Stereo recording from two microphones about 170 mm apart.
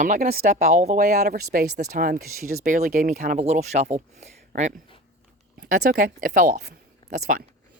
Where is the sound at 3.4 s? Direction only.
40° right (ahead or behind).